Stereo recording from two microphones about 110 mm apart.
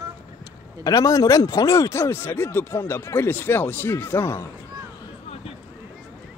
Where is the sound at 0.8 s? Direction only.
35° left (ahead or behind).